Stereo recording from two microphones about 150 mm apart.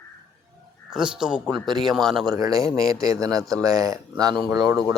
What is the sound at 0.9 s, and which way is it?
Speech, 5° right (ahead or behind).